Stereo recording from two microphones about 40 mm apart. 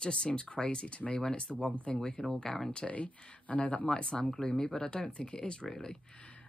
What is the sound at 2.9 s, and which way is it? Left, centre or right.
Speech, left.